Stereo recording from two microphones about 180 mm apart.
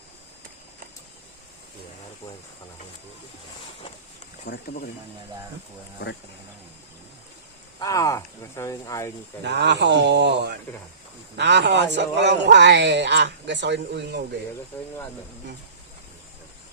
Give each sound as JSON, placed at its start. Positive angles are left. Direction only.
{"t": 4.4, "sound": "speech", "side_deg": 60}
{"t": 7.8, "sound": "speech", "side_deg": 20}
{"t": 9.4, "sound": "speech", "side_deg": -70}
{"t": 14.7, "sound": "speech", "side_deg": 15}